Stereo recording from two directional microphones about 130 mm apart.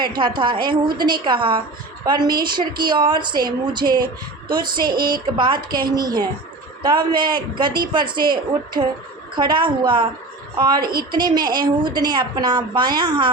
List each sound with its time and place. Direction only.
0.0 s a woman's voice: 35° right (ahead or behind)